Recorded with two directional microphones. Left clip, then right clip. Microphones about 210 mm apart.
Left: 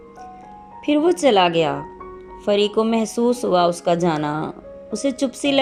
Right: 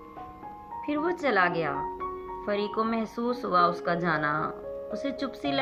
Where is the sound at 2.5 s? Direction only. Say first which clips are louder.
Left 12 dB; 5° left (ahead or behind).